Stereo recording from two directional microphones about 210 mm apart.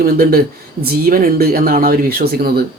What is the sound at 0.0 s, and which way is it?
Speech, 45° right (ahead or behind).